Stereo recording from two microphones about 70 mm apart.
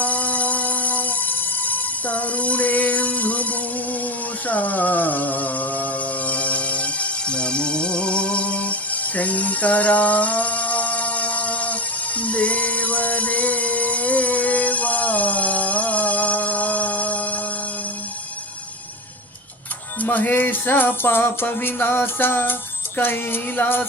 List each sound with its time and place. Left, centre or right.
0.0 s music: left
20.0 s music: left